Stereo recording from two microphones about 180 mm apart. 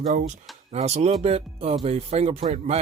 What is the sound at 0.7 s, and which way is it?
Speech, 35° right (ahead or behind).